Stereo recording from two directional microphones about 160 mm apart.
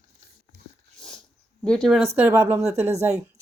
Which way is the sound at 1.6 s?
5° left (ahead or behind).